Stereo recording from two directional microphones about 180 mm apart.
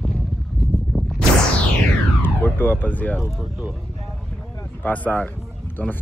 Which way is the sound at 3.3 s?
Centre (ahead or behind).